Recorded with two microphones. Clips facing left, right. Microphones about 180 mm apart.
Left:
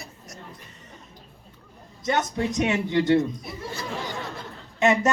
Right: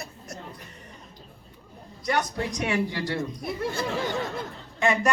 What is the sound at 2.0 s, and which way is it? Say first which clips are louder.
Speech: left 2 dB; 20° left (ahead or behind).